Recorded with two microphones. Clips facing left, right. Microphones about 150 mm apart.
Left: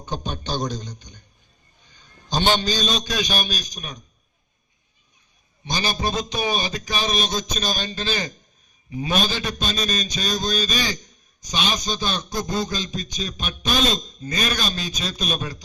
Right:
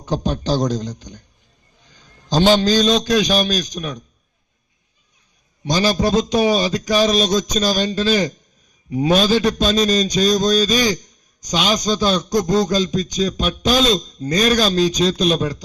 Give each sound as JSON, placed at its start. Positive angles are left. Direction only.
{"t": 0.0, "sound": "a man's voice", "side_deg": -90}
{"t": 5.6, "sound": "a man's voice", "side_deg": -85}